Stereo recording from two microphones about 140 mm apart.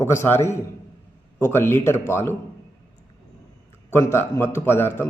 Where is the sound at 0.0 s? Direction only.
20° left (ahead or behind).